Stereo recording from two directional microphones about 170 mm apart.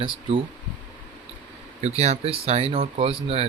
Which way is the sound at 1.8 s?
40° right (ahead or behind).